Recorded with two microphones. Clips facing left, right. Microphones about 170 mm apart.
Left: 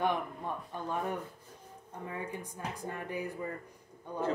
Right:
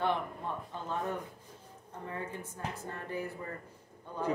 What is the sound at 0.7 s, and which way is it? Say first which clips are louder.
A woman's voice: left 1 dB; 15° left (ahead or behind).